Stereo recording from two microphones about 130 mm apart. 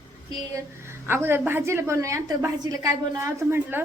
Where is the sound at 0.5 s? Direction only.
20° right (ahead or behind).